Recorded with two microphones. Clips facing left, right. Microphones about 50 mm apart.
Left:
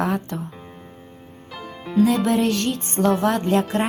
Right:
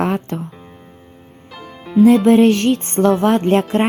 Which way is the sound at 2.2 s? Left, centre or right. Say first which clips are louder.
Right 9 dB; right.